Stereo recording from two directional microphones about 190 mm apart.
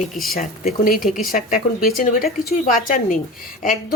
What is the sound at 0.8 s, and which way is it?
Speech, 50° left (ahead or behind).